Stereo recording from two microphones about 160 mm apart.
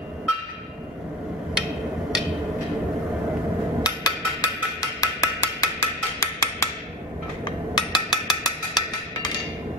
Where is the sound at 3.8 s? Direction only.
25° left (ahead or behind).